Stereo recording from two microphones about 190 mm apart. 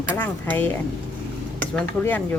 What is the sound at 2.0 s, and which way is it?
Speech, 10° left (ahead or behind).